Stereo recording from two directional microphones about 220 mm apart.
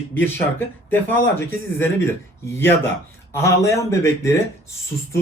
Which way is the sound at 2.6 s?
10° left (ahead or behind).